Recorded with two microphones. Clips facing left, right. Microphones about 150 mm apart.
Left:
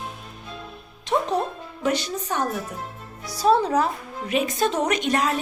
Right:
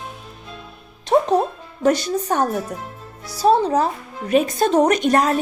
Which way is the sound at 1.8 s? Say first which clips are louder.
Right 7 dB; 40° right (ahead or behind).